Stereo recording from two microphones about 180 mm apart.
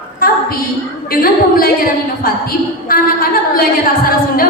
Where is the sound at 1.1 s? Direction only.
55° left (ahead or behind).